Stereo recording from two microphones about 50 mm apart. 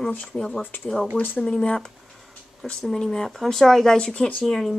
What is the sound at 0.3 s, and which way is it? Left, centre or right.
Speech, centre.